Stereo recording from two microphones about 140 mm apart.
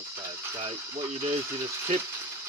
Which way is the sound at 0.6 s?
40° right (ahead or behind).